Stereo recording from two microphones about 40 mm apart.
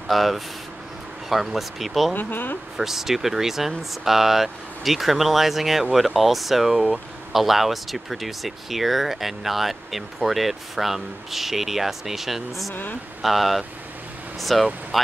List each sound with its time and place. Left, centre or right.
0.1 s speech: centre
2.1 s speech: left
2.8 s speech: centre